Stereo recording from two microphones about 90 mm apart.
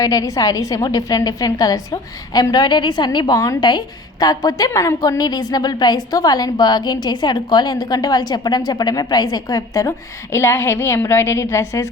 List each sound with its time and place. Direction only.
0.0 s a woman's voice: 40° left (ahead or behind)
10.3 s a woman's voice: 30° left (ahead or behind)